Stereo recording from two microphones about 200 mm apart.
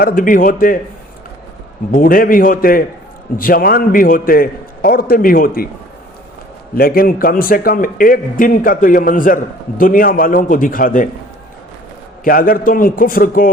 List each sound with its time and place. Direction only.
0.0 s a man's voice: 45° left (ahead or behind)
1.9 s a man's voice: 45° left (ahead or behind)
6.7 s a man's voice: 45° left (ahead or behind)
12.2 s a man's voice: 45° left (ahead or behind)